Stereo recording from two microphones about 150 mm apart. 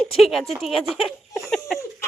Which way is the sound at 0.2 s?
Centre (ahead or behind).